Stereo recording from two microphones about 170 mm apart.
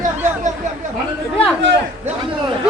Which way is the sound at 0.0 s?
45° right (ahead or behind).